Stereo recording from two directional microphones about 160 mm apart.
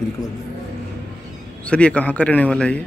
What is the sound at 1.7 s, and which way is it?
A man's voice, 5° left (ahead or behind).